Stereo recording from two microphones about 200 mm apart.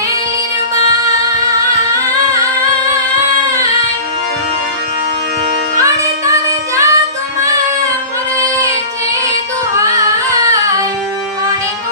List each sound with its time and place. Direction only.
5.8 s child singing: 15° right (ahead or behind)
8.4 s child singing: 15° right (ahead or behind)
10.2 s singing: 15° right (ahead or behind)